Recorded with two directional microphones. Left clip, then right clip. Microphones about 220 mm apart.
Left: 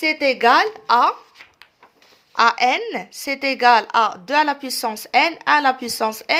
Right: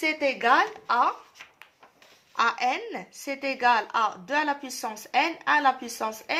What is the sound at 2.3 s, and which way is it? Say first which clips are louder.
A woman's voice: left 9 dB; 50° left (ahead or behind).